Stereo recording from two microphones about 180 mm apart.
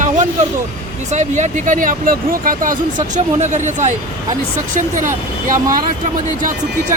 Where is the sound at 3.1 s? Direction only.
40° right (ahead or behind).